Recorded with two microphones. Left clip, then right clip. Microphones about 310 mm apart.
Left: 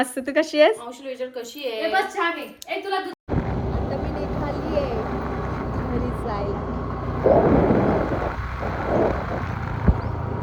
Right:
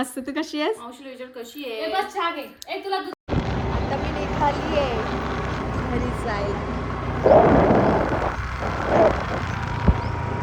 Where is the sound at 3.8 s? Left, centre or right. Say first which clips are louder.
Right 2 dB; centre.